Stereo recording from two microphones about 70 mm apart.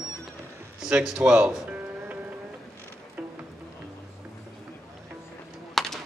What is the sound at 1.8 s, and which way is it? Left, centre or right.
Music, right.